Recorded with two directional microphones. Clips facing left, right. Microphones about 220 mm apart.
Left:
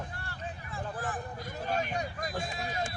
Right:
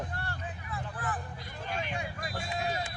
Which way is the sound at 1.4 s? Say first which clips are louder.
Left 7 dB; 45° left (ahead or behind).